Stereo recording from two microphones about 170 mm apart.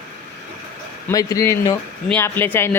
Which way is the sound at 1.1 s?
20° left (ahead or behind).